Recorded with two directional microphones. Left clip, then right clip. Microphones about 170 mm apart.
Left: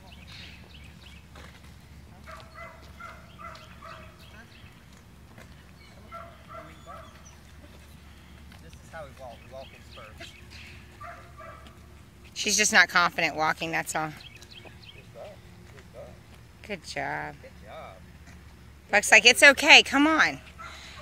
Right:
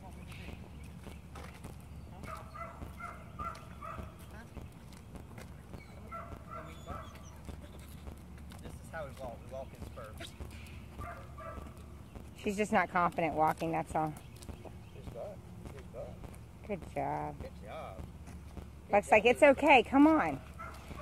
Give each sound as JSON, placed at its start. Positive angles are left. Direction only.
{"t": 8.9, "sound": "a sound", "side_deg": -10}
{"t": 12.4, "sound": "speech", "side_deg": 20}
{"t": 16.6, "sound": "speech", "side_deg": 20}
{"t": 17.6, "sound": "rain on surface", "side_deg": -10}
{"t": 18.9, "sound": "speech", "side_deg": 20}